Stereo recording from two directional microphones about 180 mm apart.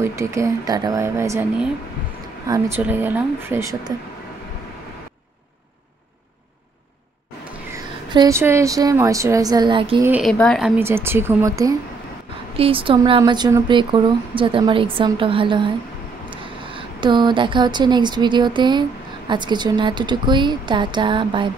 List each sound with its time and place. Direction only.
0.0 s speech: 15° right (ahead or behind)
2.4 s speech: 20° right (ahead or behind)
8.1 s speech: 20° right (ahead or behind)
10.2 s speech: 5° left (ahead or behind)
10.8 s speech: 15° right (ahead or behind)
12.5 s speech: 30° right (ahead or behind)